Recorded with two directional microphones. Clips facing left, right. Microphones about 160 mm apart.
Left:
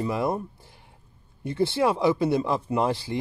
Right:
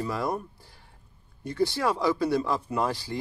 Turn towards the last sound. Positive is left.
turn(degrees=25)  # may be behind; listen again after turning